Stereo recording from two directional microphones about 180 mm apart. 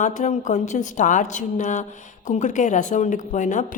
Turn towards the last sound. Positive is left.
turn(degrees=45)  # may be behind; listen again after turning